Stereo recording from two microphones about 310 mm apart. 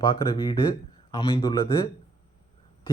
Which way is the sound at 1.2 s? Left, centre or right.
Centre.